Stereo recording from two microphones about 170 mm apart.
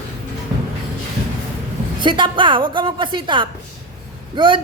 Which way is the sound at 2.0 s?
25° right (ahead or behind).